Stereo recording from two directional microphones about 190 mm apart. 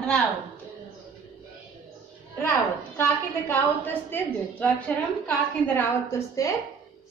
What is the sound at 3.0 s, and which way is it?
A woman's voice, 10° left (ahead or behind).